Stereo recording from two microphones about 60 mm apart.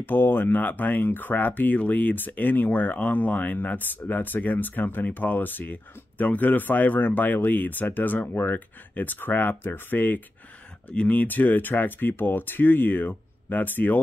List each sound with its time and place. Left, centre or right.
0.0 s speech: left